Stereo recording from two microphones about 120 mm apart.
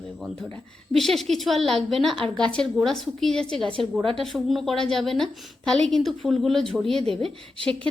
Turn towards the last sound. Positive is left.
turn(degrees=5)  # may be behind; listen again after turning